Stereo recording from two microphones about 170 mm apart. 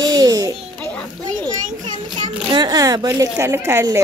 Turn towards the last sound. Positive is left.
turn(degrees=-15)  # may be behind; listen again after turning